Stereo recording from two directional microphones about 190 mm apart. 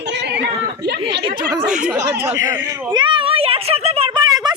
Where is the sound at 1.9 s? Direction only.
15° right (ahead or behind).